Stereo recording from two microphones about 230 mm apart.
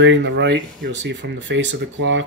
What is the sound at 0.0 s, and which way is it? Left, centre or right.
Speech, right.